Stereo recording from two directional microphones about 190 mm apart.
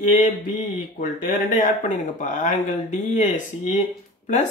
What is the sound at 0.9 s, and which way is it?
Speech, 40° left (ahead or behind).